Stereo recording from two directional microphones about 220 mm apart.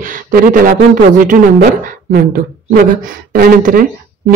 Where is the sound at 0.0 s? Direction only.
40° right (ahead or behind).